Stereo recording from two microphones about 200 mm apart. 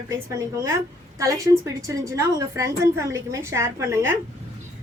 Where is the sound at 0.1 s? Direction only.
15° right (ahead or behind).